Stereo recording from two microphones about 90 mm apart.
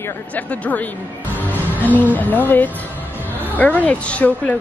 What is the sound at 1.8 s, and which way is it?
A woman's voice, 20° left (ahead or behind).